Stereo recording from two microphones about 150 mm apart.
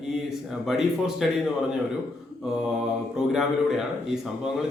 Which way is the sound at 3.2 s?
5° right (ahead or behind).